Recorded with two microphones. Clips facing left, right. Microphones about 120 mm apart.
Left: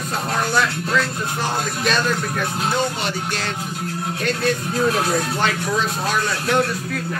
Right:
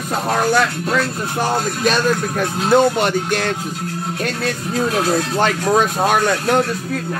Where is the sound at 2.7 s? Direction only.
55° right (ahead or behind).